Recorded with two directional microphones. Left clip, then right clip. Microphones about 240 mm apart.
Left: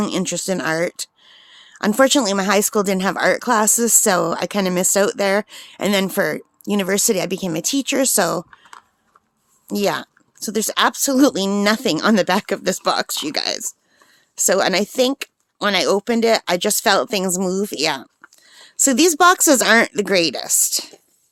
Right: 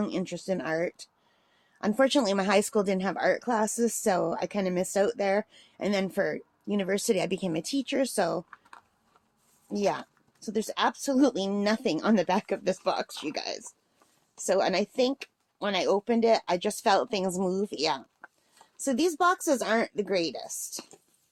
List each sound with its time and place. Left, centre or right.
0.0 s speech: left
9.7 s speech: left